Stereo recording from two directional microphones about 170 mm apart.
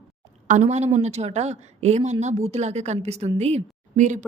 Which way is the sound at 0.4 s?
45° right (ahead or behind).